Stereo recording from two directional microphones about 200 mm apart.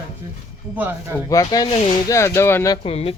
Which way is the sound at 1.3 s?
15° left (ahead or behind).